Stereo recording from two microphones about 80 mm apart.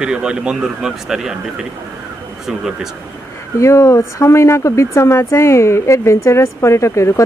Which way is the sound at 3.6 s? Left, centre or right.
Left.